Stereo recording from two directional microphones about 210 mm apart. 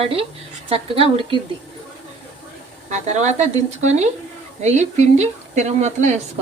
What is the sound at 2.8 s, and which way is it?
Speech, 35° right (ahead or behind).